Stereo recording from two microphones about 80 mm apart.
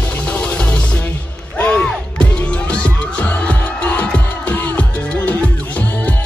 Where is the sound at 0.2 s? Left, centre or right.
Centre.